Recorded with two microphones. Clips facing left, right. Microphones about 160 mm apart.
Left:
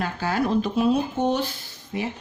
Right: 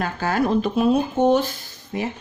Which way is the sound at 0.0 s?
50° right (ahead or behind).